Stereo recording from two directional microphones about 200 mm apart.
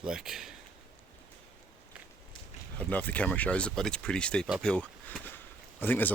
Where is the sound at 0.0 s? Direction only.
5° right (ahead or behind).